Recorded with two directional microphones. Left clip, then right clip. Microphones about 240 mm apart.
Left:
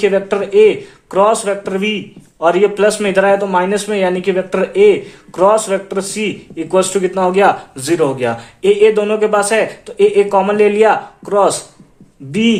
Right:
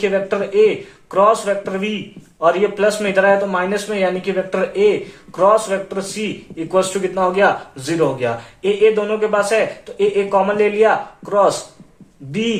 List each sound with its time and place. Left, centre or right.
0.0 s a man's voice: left